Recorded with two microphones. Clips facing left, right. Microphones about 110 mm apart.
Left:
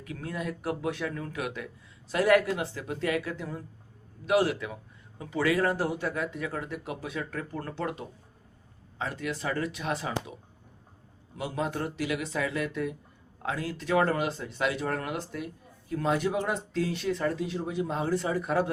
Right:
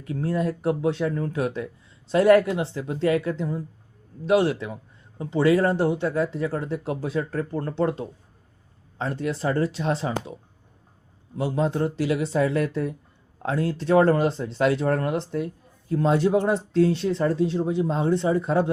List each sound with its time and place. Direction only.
0.0 s speech: 30° right (ahead or behind)
11.3 s speech: 30° right (ahead or behind)